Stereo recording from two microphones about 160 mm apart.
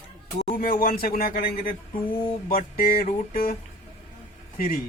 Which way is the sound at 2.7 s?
65° left (ahead or behind).